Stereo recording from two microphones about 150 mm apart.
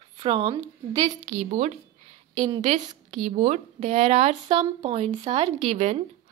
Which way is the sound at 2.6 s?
50° right (ahead or behind).